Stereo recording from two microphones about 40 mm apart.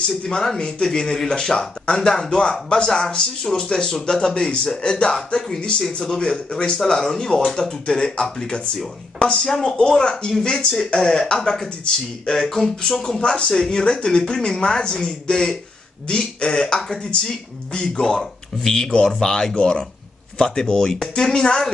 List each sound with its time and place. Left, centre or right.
0.2 s speech: centre
5.8 s speech: centre
10.1 s speech: centre
10.4 s speech: left
19.5 s speech: left